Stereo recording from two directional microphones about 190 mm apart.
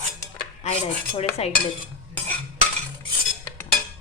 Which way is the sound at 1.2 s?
35° left (ahead or behind).